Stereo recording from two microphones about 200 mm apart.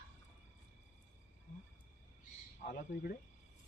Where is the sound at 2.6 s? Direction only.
40° left (ahead or behind).